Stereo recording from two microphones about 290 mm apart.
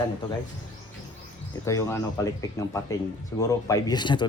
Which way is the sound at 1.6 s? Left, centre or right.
Centre.